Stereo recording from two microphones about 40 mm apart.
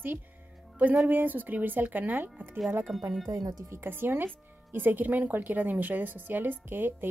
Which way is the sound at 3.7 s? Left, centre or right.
Right.